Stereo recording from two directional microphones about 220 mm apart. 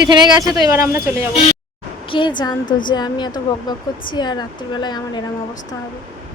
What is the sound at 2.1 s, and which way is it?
Speech, 20° left (ahead or behind).